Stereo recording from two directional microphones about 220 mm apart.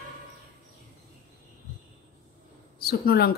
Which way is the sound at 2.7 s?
45° left (ahead or behind).